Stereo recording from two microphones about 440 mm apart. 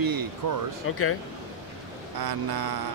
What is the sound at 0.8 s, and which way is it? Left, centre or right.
Speech, left.